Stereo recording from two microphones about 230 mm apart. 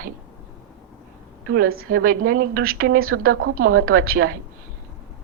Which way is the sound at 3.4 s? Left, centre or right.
Right.